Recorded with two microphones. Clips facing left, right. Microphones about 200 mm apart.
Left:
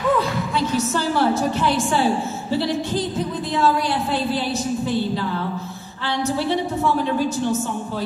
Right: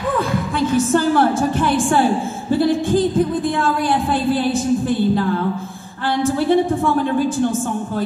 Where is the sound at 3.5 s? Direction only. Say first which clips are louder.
Right 1 dB; 50° right (ahead or behind).